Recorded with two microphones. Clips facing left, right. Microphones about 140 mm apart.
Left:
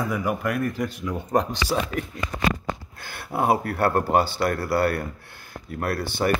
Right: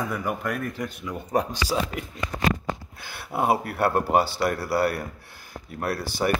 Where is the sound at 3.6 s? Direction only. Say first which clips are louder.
Left 1 dB; 5° right (ahead or behind).